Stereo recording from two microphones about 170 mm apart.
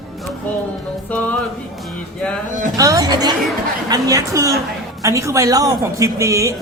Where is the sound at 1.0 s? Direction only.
10° left (ahead or behind).